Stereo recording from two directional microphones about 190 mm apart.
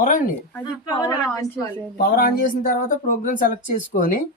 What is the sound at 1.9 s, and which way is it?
Speech, 55° left (ahead or behind).